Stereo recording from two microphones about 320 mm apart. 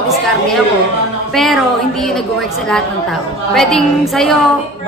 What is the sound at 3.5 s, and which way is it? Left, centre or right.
Speech, centre.